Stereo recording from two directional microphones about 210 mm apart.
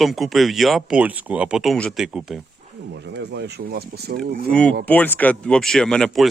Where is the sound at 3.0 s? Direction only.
55° right (ahead or behind).